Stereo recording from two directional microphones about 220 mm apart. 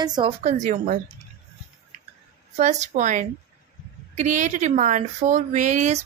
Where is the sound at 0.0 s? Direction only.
20° right (ahead or behind).